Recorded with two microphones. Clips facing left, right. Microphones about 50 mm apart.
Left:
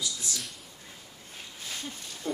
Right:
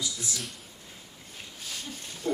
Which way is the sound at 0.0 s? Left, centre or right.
Centre.